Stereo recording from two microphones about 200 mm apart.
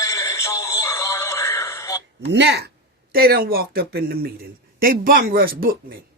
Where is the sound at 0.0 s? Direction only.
15° left (ahead or behind).